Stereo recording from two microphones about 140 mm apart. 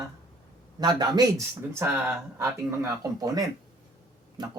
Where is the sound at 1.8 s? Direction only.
15° right (ahead or behind).